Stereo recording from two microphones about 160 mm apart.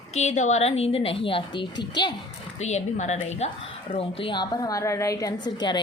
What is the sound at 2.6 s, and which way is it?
Speech, 45° left (ahead or behind).